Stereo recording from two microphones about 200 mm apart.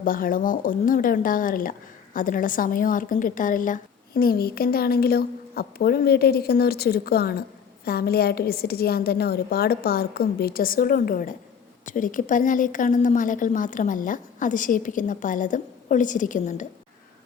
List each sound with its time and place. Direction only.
0.0 s a woman's voice: 45° left (ahead or behind)